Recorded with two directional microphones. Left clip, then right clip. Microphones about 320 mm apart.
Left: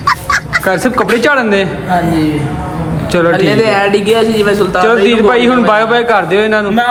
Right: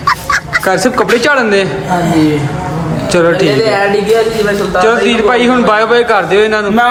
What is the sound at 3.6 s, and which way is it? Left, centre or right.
Speech, left.